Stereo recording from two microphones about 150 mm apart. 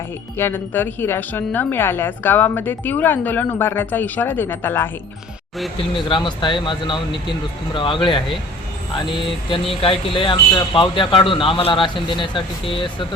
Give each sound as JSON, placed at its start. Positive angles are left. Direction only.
{"t": 0.3, "sound": "speech", "side_deg": 15}
{"t": 5.9, "sound": "speech", "side_deg": 35}